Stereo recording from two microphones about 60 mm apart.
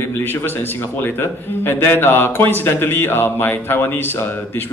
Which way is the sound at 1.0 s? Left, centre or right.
Left.